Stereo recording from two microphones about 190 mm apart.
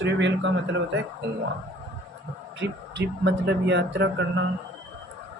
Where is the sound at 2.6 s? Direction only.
65° right (ahead or behind).